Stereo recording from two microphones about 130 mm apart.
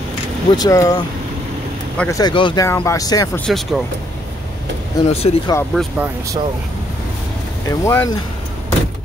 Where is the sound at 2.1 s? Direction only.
30° left (ahead or behind).